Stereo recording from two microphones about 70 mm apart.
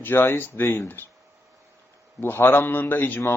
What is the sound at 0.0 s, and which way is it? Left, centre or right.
A man's voice, left.